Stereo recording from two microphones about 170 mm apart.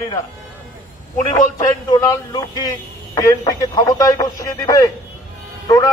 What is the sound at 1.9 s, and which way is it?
A man's voice, 25° left (ahead or behind).